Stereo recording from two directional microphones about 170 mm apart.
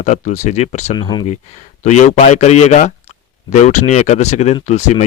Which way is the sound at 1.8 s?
45° left (ahead or behind).